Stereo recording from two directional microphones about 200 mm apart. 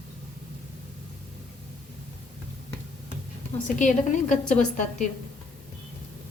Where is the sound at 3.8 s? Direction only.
40° left (ahead or behind).